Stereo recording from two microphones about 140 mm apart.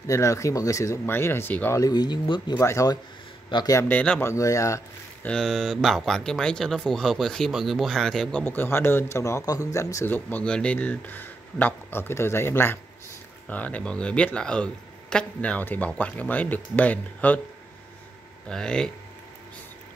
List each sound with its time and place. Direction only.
0.0 s speech: 20° left (ahead or behind)
1.8 s speech: 30° left (ahead or behind)
2.6 s a man's voice: 20° left (ahead or behind)
3.9 s speech: 10° left (ahead or behind)
4.3 s speech: 20° left (ahead or behind)
5.2 s speech: 5° left (ahead or behind)
18.5 s speech: 5° left (ahead or behind)